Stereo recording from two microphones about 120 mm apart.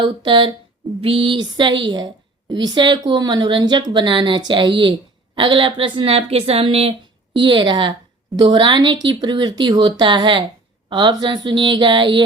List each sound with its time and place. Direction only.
0.0 s a woman's voice: 40° right (ahead or behind)
7.3 s a woman's voice: 40° right (ahead or behind)